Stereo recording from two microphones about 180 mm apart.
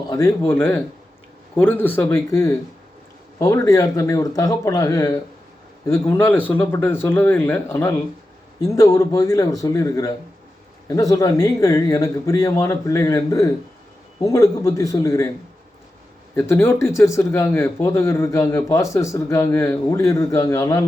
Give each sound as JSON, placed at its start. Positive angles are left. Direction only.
{"t": 0.1, "sound": "speech", "side_deg": 15}
{"t": 16.3, "sound": "speech", "side_deg": 15}